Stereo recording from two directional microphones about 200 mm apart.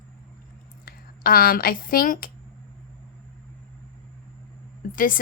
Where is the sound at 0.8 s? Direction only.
50° left (ahead or behind).